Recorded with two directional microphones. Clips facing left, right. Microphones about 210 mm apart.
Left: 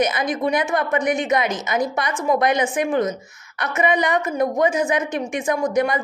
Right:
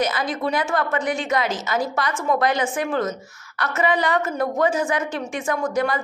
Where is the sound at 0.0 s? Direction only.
20° left (ahead or behind).